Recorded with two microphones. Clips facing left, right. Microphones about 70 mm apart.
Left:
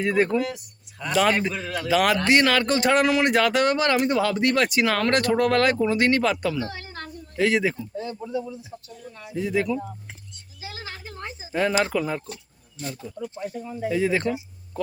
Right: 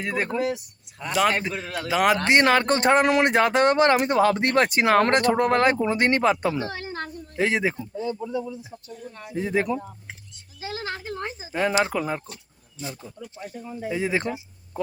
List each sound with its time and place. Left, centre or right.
0.0 s speech: centre
0.3 s speech: right
1.1 s speech: centre
1.5 s speech: right
9.1 s speech: right
10.6 s a sound: right
11.5 s speech: centre
13.4 s speech: centre